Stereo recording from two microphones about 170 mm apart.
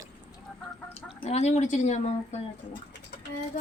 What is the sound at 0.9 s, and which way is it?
Speech, 35° left (ahead or behind).